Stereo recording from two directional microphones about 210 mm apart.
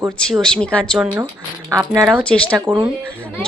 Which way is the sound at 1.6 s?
15° right (ahead or behind).